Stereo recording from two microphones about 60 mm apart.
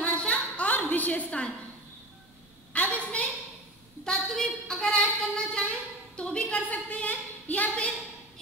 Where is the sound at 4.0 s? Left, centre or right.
Centre.